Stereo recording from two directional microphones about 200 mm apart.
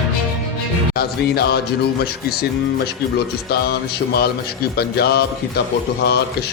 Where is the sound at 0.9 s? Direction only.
55° left (ahead or behind).